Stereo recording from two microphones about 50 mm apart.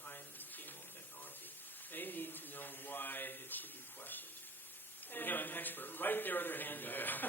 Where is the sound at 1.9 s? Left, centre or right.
Left.